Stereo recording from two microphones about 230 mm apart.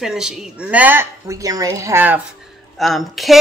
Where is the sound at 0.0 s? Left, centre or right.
Centre.